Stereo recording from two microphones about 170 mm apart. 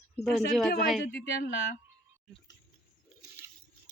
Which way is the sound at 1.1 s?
75° left (ahead or behind).